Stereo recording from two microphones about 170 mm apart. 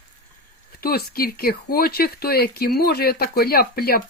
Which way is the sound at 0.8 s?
65° left (ahead or behind).